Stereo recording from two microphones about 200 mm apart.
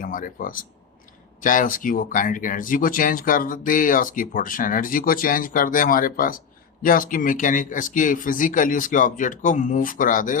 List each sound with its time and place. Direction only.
0.0 s speech: 45° left (ahead or behind)